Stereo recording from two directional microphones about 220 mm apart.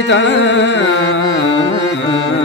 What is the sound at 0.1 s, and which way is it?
Music, 55° left (ahead or behind).